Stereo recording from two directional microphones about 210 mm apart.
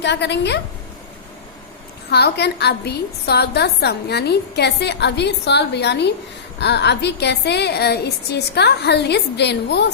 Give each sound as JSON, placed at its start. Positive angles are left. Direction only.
{"t": 0.0, "sound": "a woman's voice", "side_deg": 55}
{"t": 2.0, "sound": "a woman's voice", "side_deg": 50}